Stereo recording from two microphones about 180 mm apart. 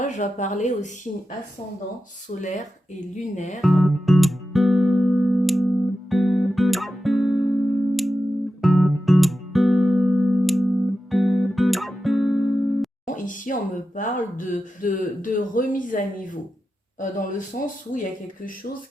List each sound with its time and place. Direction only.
0.0 s speech: 45° left (ahead or behind)
2.3 s speech: 40° left (ahead or behind)
3.6 s music: centre (ahead or behind)
13.1 s speech: 45° left (ahead or behind)